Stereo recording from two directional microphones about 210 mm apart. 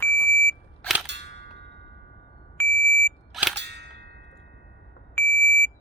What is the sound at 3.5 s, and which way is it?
Cap gun, 55° right (ahead or behind).